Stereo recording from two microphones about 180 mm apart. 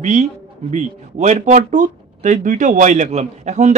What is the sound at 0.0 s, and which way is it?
Speech, 40° right (ahead or behind).